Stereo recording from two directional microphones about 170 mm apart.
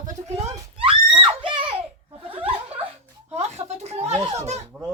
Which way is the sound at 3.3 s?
40° right (ahead or behind).